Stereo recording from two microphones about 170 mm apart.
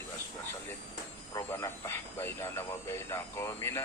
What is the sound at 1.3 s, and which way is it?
Speech, 20° left (ahead or behind).